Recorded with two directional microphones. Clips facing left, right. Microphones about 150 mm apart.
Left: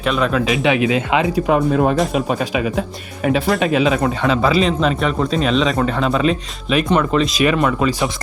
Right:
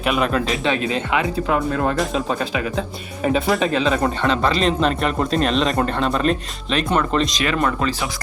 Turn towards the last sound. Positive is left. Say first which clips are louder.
# left 5 dB
turn(degrees=10)  # may be behind; listen again after turning